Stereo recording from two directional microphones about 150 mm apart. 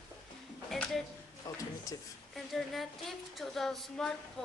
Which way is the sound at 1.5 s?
25° left (ahead or behind).